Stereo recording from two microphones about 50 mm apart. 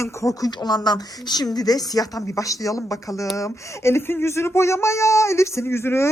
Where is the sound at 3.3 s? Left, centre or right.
Left.